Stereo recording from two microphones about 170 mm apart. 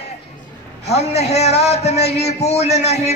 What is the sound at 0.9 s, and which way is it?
A man's voice, 40° left (ahead or behind).